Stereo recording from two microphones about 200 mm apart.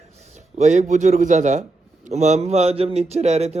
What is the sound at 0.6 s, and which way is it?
A man's voice, 35° right (ahead or behind).